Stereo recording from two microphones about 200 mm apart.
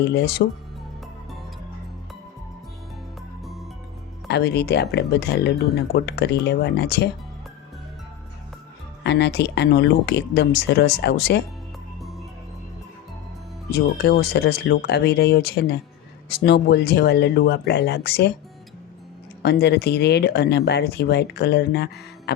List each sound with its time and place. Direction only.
0.0 s speech: 55° left (ahead or behind)
4.3 s speech: 55° left (ahead or behind)
9.0 s speech: 60° left (ahead or behind)
13.7 s speech: 50° left (ahead or behind)
19.4 s speech: 55° left (ahead or behind)
22.3 s a sound: 55° left (ahead or behind)